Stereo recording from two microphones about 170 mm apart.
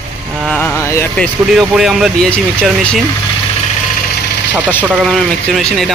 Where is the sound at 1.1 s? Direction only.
5° left (ahead or behind).